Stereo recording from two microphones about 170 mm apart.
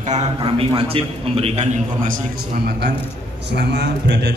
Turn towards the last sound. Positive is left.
turn(degrees=-85)